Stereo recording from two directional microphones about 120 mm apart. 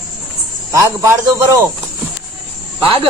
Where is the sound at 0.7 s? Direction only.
25° right (ahead or behind).